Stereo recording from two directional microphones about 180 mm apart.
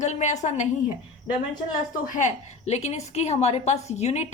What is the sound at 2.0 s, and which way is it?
A woman's voice, 45° left (ahead or behind).